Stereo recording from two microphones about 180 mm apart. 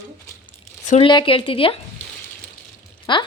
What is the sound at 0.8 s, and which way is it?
Speech, 40° left (ahead or behind).